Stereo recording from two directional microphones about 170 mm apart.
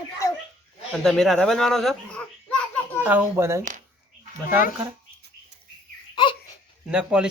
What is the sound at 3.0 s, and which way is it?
Speech, 10° right (ahead or behind).